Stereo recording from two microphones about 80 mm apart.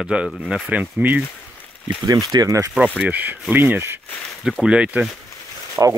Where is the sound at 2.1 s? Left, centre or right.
Right.